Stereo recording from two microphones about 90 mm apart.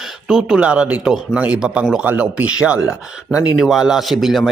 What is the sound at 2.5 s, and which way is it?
A man's voice, 10° right (ahead or behind).